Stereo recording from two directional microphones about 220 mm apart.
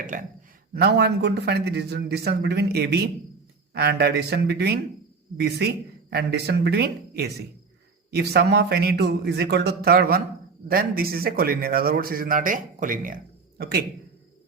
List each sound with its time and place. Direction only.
0.1 s a man's voice: 35° right (ahead or behind)